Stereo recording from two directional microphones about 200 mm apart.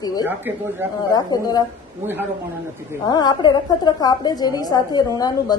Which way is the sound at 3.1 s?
20° left (ahead or behind).